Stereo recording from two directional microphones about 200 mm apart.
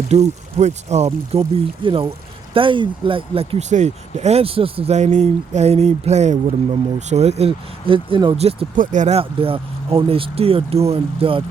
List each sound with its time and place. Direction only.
0.1 s speech: 35° right (ahead or behind)
8.7 s speech: 40° right (ahead or behind)